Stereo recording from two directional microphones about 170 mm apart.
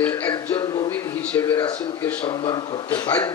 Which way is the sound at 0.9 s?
10° left (ahead or behind).